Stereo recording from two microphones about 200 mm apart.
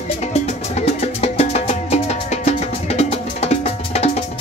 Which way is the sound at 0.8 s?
30° left (ahead or behind).